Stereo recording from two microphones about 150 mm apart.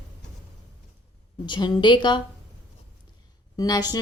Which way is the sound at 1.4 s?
30° left (ahead or behind).